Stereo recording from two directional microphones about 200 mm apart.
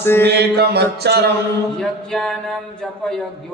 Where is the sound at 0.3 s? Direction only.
55° right (ahead or behind).